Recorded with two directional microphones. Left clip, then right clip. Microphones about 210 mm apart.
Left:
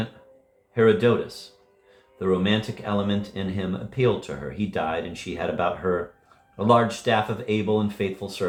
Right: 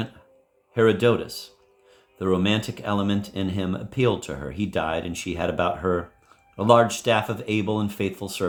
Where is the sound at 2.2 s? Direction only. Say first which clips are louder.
Even; 55° right (ahead or behind).